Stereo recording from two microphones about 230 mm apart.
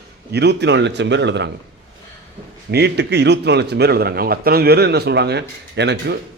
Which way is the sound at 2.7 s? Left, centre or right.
Right.